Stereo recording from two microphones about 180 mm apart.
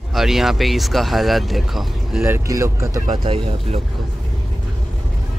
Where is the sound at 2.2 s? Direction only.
15° right (ahead or behind).